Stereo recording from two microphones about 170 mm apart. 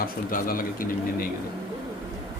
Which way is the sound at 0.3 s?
55° left (ahead or behind).